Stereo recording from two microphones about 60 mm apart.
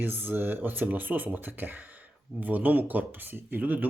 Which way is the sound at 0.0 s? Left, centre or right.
Right.